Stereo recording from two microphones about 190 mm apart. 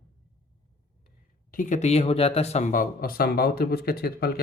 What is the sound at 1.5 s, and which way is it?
A man's voice, 40° left (ahead or behind).